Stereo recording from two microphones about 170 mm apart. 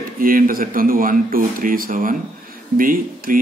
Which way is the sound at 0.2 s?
55° right (ahead or behind).